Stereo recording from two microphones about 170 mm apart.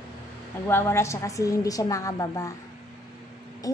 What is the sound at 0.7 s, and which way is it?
Speech, 15° left (ahead or behind).